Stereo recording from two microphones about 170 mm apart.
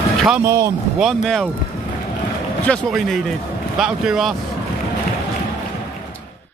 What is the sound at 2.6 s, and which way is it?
Speech, centre (ahead or behind).